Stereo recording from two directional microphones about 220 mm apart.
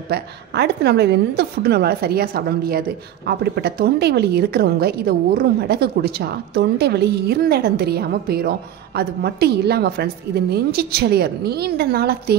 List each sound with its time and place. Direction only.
0.1 s a woman's voice: 50° right (ahead or behind)